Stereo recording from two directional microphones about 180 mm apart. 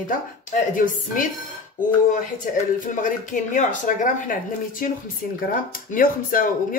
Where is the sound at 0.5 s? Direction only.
50° left (ahead or behind).